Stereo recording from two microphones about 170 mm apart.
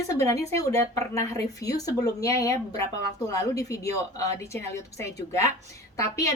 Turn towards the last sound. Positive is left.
turn(degrees=15)  # may be behind; listen again after turning